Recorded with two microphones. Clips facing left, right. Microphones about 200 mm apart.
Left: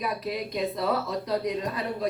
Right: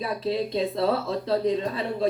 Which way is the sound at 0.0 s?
30° right (ahead or behind).